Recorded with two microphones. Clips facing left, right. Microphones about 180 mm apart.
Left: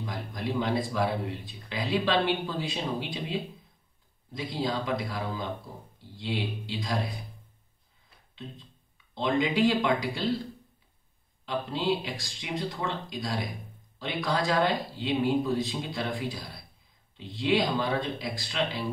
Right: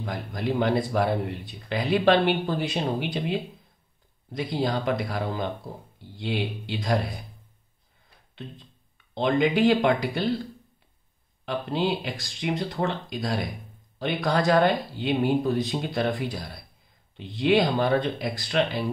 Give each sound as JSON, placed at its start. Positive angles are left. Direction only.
{"t": 0.0, "sound": "speech", "side_deg": -60}
{"t": 4.4, "sound": "speech", "side_deg": -65}
{"t": 8.4, "sound": "speech", "side_deg": -65}
{"t": 11.4, "sound": "speech", "side_deg": -60}